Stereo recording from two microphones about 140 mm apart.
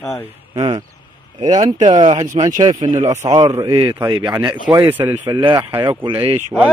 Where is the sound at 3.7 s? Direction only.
35° right (ahead or behind).